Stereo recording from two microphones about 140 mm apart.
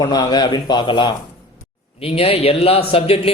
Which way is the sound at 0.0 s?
30° left (ahead or behind).